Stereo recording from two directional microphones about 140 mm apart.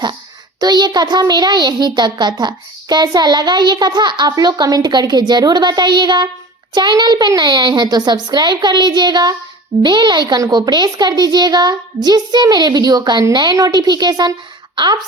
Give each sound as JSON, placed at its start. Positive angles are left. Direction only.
{"t": 0.6, "sound": "a child's voice", "side_deg": -30}